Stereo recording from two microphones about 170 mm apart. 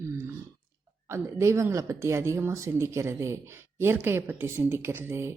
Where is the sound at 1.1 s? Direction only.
15° right (ahead or behind).